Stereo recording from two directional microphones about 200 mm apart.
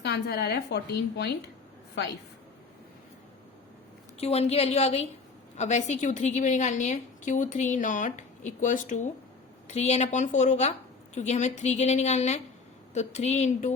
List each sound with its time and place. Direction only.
0.0 s a woman's voice: 55° left (ahead or behind)
4.2 s a woman's voice: 30° left (ahead or behind)